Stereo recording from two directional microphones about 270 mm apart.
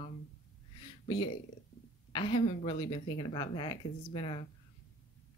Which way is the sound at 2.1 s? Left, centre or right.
Centre.